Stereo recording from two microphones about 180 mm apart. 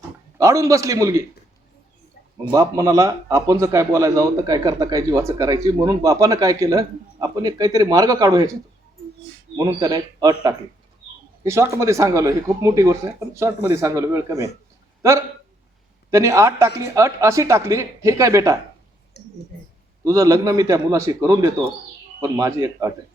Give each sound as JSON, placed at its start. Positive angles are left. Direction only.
{"t": 0.3, "sound": "speech", "side_deg": -15}
{"t": 2.5, "sound": "a man's voice", "side_deg": -20}
{"t": 9.6, "sound": "a man's voice", "side_deg": -20}
{"t": 16.0, "sound": "speech", "side_deg": -15}
{"t": 19.1, "sound": "a sound", "side_deg": 65}
{"t": 20.1, "sound": "speech", "side_deg": -15}